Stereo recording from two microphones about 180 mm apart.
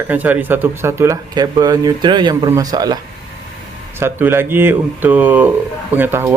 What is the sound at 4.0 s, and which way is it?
Speech, 10° right (ahead or behind).